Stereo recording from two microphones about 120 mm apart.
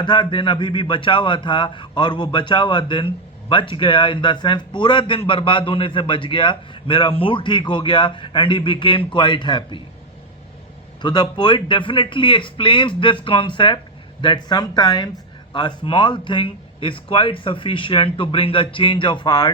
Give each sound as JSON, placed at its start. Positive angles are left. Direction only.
{"t": 0.0, "sound": "a man's voice", "side_deg": 40}
{"t": 11.0, "sound": "a man's voice", "side_deg": 40}